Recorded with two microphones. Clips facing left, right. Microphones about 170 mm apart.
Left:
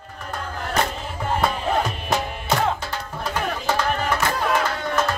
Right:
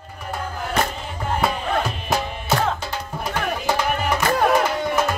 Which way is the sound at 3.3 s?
10° right (ahead or behind).